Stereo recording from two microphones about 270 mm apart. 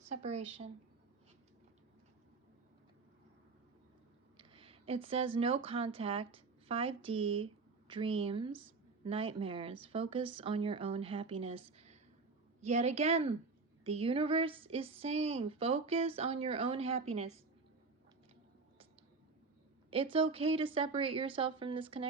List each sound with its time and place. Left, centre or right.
0.1 s speech: right
4.4 s speech: right
19.9 s speech: right